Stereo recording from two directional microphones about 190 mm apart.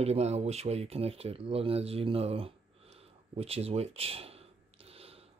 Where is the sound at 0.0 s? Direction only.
35° right (ahead or behind).